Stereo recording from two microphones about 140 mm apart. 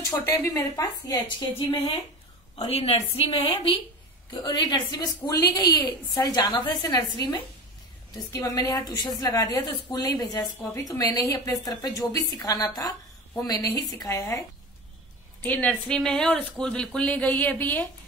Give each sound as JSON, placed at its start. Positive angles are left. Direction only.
{"t": 0.1, "sound": "a woman's voice", "side_deg": 15}
{"t": 2.6, "sound": "a woman's voice", "side_deg": 45}
{"t": 4.3, "sound": "a woman's voice", "side_deg": 30}
{"t": 15.4, "sound": "speech", "side_deg": 10}